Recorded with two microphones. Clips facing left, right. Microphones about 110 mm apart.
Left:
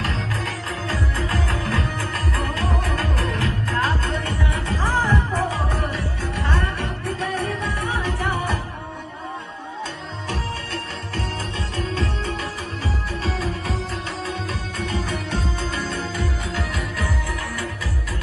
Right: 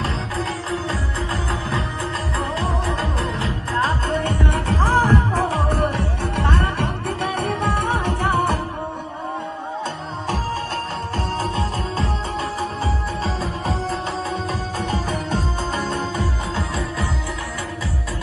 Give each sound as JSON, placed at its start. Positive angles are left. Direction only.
{"t": 0.7, "sound": "music", "side_deg": -30}
{"t": 4.7, "sound": "music", "side_deg": -80}
{"t": 12.8, "sound": "music", "side_deg": -30}
{"t": 14.8, "sound": "music", "side_deg": -45}